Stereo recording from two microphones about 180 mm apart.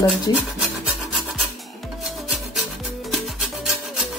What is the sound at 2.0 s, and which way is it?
Rub, centre (ahead or behind).